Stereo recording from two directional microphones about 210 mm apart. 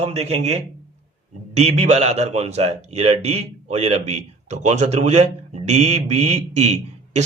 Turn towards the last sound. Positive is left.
turn(degrees=-35)  # may be behind; listen again after turning